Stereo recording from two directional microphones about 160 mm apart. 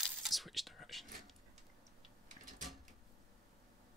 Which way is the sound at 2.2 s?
50° right (ahead or behind).